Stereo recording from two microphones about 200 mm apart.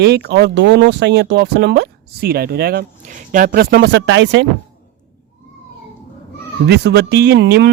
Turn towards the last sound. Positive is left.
turn(degrees=-55)  # may be behind; listen again after turning